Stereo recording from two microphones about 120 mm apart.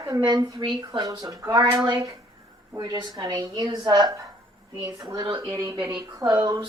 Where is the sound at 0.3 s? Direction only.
30° right (ahead or behind).